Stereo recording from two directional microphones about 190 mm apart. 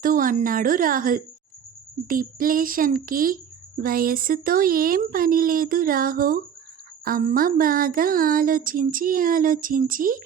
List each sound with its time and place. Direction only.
0.0 s speech: 45° right (ahead or behind)